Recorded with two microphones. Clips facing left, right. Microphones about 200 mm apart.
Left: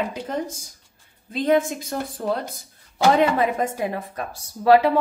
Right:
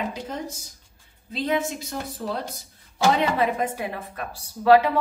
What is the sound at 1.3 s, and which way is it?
Speech, 50° left (ahead or behind).